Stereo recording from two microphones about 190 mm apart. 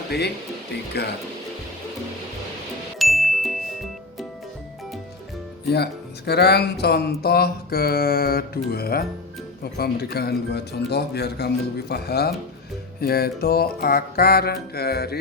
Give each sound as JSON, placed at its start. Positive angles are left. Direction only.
{"t": 3.0, "sound": "ding", "side_deg": 0}
{"t": 5.6, "sound": "speech", "side_deg": 60}
{"t": 13.0, "sound": "music", "side_deg": 55}